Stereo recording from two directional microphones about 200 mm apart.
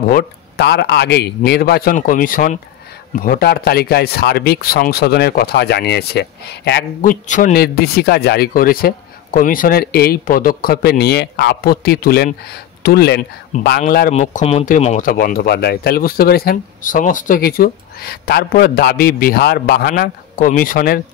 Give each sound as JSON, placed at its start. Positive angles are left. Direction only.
{"t": 0.1, "sound": "speech", "side_deg": 55}
{"t": 7.1, "sound": "speech", "side_deg": 40}